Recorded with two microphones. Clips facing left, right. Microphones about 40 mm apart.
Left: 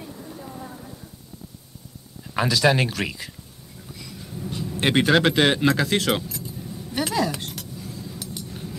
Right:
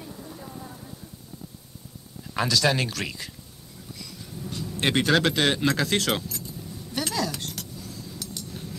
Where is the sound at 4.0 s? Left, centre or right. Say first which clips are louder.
Left 4 dB; centre.